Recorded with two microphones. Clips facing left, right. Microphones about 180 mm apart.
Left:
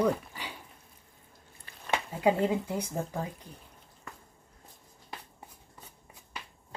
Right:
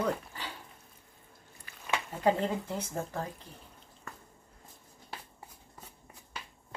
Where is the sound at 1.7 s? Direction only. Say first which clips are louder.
Left 2 dB; 30° left (ahead or behind).